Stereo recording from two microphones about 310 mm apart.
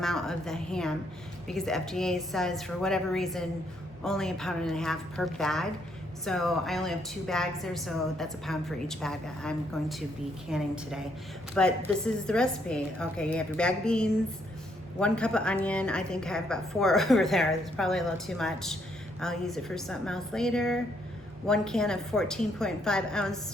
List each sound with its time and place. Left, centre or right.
0.0 s a woman's voice: centre